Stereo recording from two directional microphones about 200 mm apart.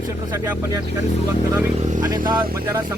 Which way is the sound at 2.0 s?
20° right (ahead or behind).